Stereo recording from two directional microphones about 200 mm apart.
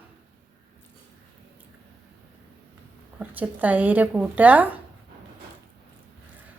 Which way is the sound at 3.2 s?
10° right (ahead or behind).